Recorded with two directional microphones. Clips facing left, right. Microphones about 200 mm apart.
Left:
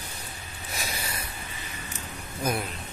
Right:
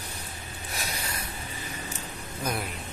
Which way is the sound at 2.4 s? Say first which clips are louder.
Left 3 dB; 5° left (ahead or behind).